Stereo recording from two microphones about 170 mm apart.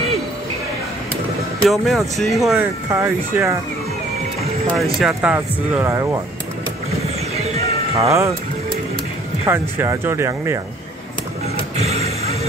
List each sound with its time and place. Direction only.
1.7 s speech: centre (ahead or behind)
2.6 s speech: 15° right (ahead or behind)
5.0 s speech: 5° right (ahead or behind)
7.3 s music: 40° right (ahead or behind)
8.1 s speech: 15° right (ahead or behind)
9.5 s speech: 15° right (ahead or behind)
11.7 s music: 40° right (ahead or behind)